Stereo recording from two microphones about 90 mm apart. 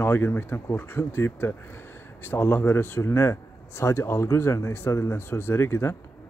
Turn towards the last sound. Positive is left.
turn(degrees=30)  # may be behind; listen again after turning